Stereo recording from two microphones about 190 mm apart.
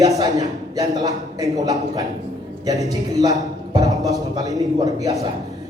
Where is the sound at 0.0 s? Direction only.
15° right (ahead or behind).